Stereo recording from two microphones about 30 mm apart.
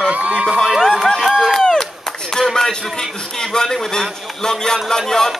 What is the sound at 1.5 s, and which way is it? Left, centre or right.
Speech, centre.